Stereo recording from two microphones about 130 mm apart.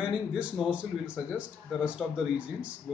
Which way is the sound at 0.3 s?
5° right (ahead or behind).